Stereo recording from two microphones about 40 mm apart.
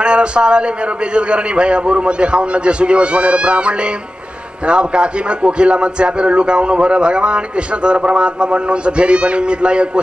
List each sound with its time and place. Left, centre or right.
0.0 s a man's voice: right